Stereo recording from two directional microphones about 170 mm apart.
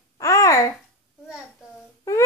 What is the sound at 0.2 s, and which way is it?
Babbling, 20° left (ahead or behind).